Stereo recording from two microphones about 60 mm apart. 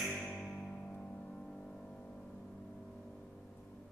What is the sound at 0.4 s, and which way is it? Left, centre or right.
Music, centre.